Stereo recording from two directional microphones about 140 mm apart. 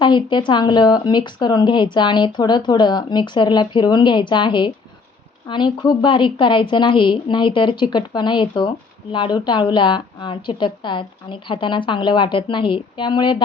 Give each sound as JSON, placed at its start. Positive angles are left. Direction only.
{"t": 0.0, "sound": "speech", "side_deg": 35}